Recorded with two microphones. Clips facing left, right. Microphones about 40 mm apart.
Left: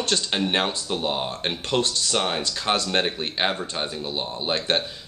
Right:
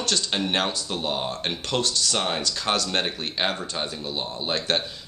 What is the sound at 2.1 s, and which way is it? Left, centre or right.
A man's voice, centre.